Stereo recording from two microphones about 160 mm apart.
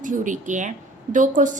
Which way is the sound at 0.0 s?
55° right (ahead or behind).